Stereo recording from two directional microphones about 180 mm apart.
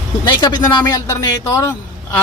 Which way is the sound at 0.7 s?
20° left (ahead or behind).